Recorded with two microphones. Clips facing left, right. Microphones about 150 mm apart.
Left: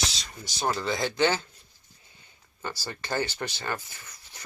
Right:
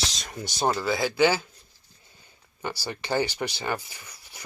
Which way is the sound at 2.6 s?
15° right (ahead or behind).